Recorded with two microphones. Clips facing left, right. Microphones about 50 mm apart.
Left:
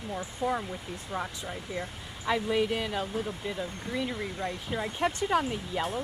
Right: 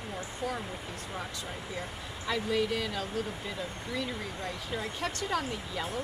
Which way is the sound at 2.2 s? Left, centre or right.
Left.